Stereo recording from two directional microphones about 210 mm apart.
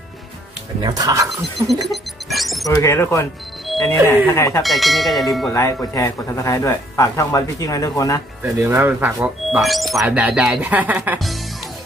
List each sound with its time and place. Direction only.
0.8 s speech: 20° right (ahead or behind)
1.5 s church bell: centre (ahead or behind)
1.9 s music: centre (ahead or behind)
2.6 s speech: 15° left (ahead or behind)
3.7 s music: centre (ahead or behind)
4.3 s speech: 15° left (ahead or behind)
4.6 s church bell: centre (ahead or behind)
5.5 s speech: 15° left (ahead or behind)
8.5 s speech: 10° right (ahead or behind)